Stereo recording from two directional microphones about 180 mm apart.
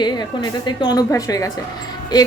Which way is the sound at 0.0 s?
20° left (ahead or behind).